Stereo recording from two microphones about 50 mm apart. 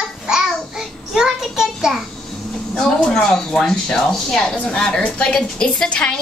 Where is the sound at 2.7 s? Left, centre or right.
Centre.